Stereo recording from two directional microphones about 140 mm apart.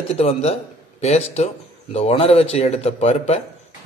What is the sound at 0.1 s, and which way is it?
Speech, 45° left (ahead or behind).